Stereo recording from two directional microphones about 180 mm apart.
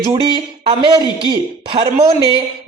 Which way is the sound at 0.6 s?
25° right (ahead or behind).